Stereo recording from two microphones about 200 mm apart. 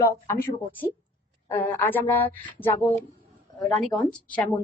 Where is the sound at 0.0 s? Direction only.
10° left (ahead or behind).